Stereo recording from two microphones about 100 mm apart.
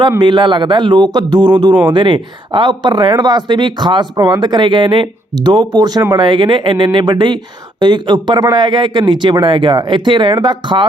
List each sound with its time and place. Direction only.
0.2 s speech: 50° right (ahead or behind)